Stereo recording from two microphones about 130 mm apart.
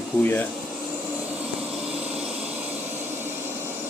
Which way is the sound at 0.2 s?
15° left (ahead or behind).